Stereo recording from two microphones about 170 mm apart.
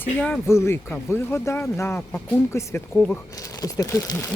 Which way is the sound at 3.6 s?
20° left (ahead or behind).